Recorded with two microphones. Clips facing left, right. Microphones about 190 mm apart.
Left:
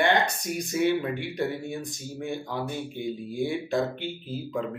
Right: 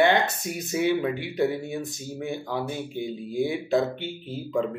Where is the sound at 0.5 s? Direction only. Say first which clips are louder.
Even; 20° right (ahead or behind).